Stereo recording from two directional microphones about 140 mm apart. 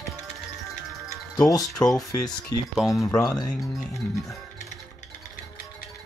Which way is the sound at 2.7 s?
Centre (ahead or behind).